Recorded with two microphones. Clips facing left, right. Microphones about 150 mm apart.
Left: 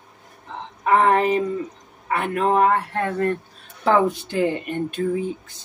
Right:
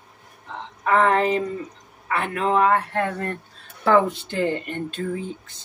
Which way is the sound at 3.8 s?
10° left (ahead or behind).